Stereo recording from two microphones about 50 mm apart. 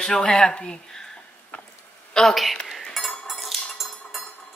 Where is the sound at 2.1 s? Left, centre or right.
Centre.